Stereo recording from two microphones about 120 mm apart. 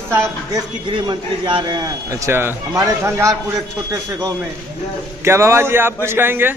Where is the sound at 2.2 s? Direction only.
20° right (ahead or behind).